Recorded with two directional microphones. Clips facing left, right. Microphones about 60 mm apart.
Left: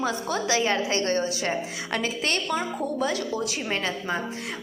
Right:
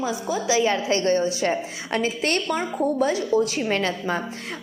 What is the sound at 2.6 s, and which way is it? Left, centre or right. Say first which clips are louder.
A woman's voice: right 5 dB; right.